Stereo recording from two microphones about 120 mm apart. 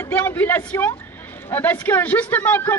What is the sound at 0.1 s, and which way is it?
A man's voice, 15° left (ahead or behind).